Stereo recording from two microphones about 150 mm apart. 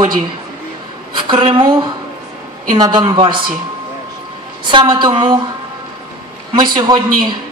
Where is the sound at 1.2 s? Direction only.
35° right (ahead or behind).